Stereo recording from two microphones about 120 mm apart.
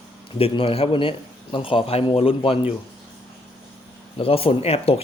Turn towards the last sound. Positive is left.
turn(degrees=55)  # may be behind; listen again after turning